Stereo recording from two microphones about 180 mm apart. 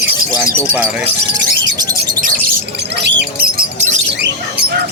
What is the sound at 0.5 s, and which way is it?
Speech, 10° right (ahead or behind).